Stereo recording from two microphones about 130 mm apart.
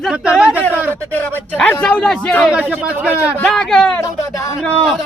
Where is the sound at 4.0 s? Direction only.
25° left (ahead or behind).